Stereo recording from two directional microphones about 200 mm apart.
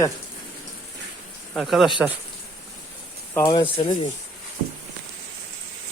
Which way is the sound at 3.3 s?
20° left (ahead or behind).